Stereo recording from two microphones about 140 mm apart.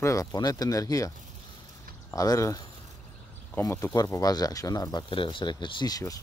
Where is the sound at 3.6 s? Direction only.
20° left (ahead or behind).